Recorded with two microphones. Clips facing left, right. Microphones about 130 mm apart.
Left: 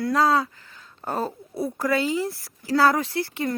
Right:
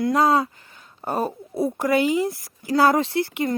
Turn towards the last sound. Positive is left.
turn(degrees=-20)  # may be behind; listen again after turning